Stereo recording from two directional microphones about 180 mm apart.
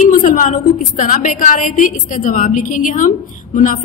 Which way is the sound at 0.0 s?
45° left (ahead or behind).